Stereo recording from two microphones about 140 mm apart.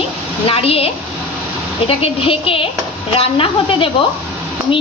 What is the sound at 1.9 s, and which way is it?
A woman's voice, 40° left (ahead or behind).